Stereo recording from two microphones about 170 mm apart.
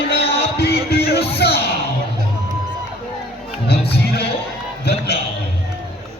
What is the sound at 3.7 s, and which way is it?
Music, 70° left (ahead or behind).